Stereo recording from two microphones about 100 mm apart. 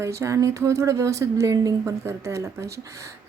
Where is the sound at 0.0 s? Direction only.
30° right (ahead or behind).